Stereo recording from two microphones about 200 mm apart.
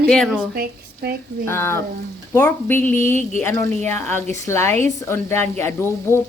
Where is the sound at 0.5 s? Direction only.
50° right (ahead or behind).